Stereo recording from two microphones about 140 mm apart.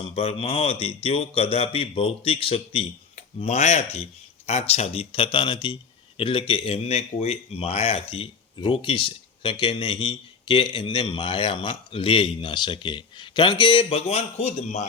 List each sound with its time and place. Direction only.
0.2 s a man's voice: 40° left (ahead or behind)